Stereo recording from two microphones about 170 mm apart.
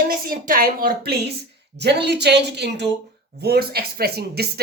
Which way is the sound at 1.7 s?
80° right.